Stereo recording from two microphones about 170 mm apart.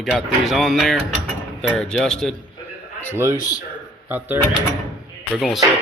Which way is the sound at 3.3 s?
20° left (ahead or behind).